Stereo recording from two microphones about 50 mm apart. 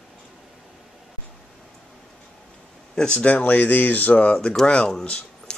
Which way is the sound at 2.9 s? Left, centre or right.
Centre.